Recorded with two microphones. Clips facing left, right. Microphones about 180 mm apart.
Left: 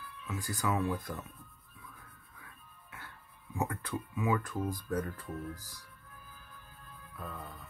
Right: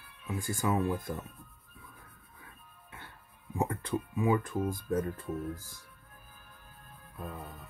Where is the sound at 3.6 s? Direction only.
25° right (ahead or behind).